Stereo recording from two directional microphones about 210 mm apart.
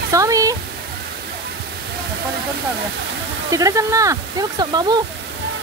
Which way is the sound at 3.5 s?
15° right (ahead or behind).